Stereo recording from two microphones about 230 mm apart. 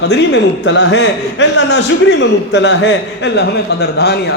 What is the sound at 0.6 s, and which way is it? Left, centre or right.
A man's voice, left.